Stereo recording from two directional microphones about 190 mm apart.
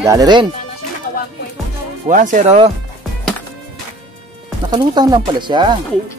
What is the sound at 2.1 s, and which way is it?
Speech, 45° right (ahead or behind).